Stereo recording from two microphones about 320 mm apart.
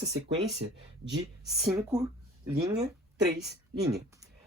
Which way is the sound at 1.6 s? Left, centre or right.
Centre.